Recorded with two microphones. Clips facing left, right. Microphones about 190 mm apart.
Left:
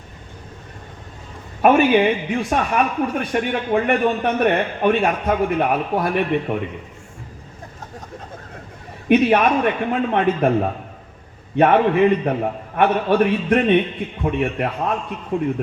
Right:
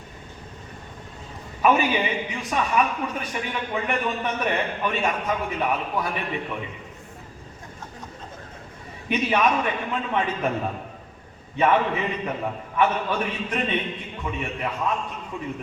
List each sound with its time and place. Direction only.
1.6 s speech: 55° left (ahead or behind)
9.0 s speech: 55° left (ahead or behind)